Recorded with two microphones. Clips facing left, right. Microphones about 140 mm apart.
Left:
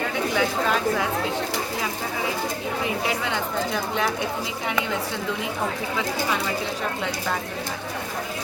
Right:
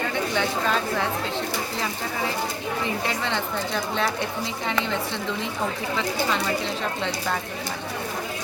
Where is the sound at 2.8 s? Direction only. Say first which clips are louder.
Left 1 dB; 10° left (ahead or behind).